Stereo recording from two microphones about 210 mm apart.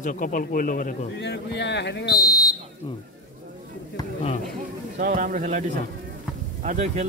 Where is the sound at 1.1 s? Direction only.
55° left (ahead or behind).